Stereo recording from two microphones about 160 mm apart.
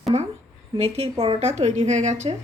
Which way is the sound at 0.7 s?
40° right (ahead or behind).